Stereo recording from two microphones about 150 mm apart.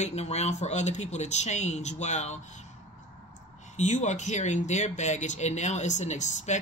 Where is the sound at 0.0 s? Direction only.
45° left (ahead or behind).